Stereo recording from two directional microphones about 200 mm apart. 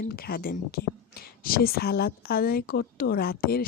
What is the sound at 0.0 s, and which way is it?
Speech, 50° left (ahead or behind).